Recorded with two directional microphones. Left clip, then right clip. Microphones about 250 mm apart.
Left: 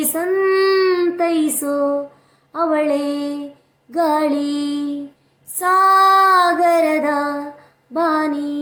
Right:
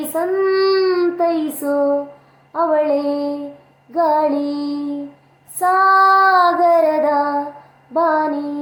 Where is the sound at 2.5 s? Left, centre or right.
Left.